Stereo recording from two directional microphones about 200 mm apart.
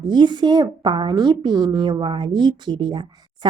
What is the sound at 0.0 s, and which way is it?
A woman's voice, 20° right (ahead or behind).